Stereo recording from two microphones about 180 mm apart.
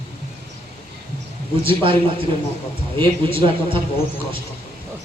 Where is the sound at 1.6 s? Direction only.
30° right (ahead or behind).